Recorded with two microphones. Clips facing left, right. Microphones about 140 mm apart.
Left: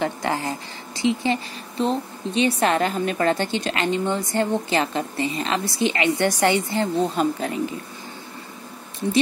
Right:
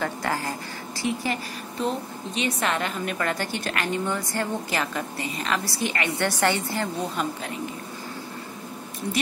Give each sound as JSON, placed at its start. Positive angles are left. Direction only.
{"t": 0.0, "sound": "a woman's voice", "side_deg": 20}
{"t": 7.2, "sound": "speech", "side_deg": 35}